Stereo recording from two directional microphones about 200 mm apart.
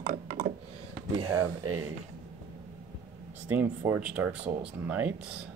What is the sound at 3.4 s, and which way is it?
Speech, 10° right (ahead or behind).